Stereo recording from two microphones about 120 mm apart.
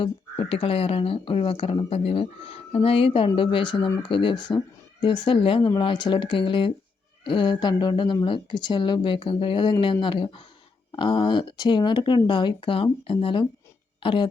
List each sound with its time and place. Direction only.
0.0 s speech: 50° left (ahead or behind)